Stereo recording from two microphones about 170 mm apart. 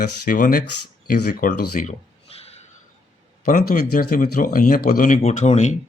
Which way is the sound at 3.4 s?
55° left (ahead or behind).